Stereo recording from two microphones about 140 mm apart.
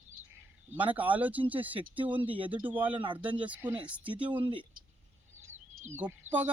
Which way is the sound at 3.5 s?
10° right (ahead or behind).